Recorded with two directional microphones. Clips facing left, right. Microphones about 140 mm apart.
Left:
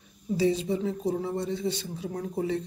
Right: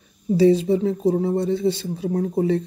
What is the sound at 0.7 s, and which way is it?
Speech, 35° right (ahead or behind).